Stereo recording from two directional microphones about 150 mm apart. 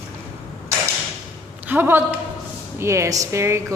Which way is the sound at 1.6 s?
15° right (ahead or behind).